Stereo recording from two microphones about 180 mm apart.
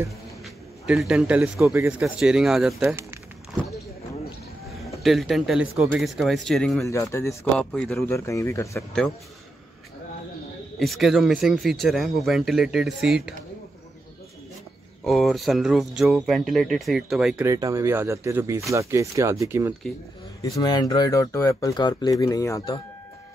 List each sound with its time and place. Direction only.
0.8 s speech: 5° right (ahead or behind)
2.9 s a sound: 15° right (ahead or behind)
5.0 s speech: centre (ahead or behind)
6.9 s speech: 15° left (ahead or behind)
7.5 s speech: 5° left (ahead or behind)
8.0 s speech: 15° left (ahead or behind)
10.8 s speech: centre (ahead or behind)
15.0 s speech: centre (ahead or behind)
17.5 s speech: 15° right (ahead or behind)
20.5 s speech: 20° left (ahead or behind)